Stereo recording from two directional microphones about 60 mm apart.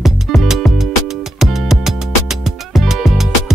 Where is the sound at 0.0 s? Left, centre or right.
Centre.